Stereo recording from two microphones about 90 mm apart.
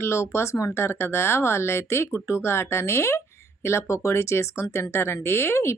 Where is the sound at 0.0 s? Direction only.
30° left (ahead or behind).